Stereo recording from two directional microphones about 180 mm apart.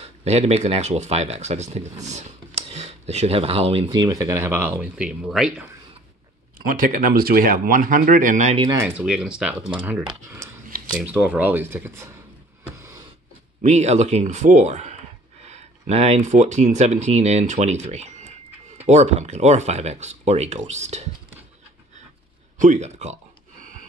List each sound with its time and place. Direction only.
0.0 s speech: 35° right (ahead or behind); by 5.7 s 5° right (ahead or behind)
6.7 s speech: 50° right (ahead or behind)
8.6 s speech: 15° right (ahead or behind)
12.7 s a sound: 15° right (ahead or behind)
13.6 s speech: 40° right (ahead or behind)
22.6 s speech: 40° right (ahead or behind)